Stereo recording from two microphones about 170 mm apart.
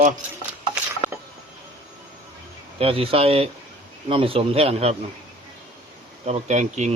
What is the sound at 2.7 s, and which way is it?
Speech, 35° right (ahead or behind).